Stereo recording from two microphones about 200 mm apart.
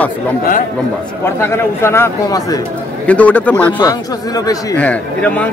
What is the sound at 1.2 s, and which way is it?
A man's voice, 10° left (ahead or behind).